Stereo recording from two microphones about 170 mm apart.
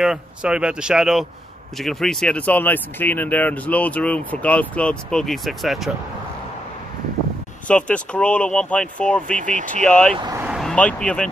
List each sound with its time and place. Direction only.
0.0 s speech: 5° right (ahead or behind)
7.6 s speech: 5° left (ahead or behind)
10.1 s speech: 25° right (ahead or behind)
10.4 s vehicle: centre (ahead or behind)